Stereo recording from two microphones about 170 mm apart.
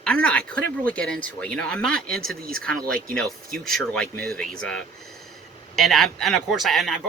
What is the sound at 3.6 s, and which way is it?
Speech, 5° left (ahead or behind).